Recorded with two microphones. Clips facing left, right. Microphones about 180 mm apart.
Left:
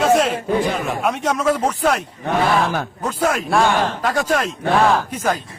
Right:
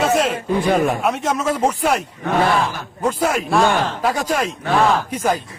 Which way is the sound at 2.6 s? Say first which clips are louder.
Left 4 dB; 55° left (ahead or behind).